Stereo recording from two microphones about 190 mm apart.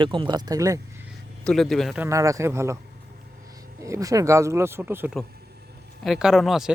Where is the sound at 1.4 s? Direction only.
Centre (ahead or behind).